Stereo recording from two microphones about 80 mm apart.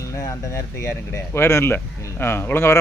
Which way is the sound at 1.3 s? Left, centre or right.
Left.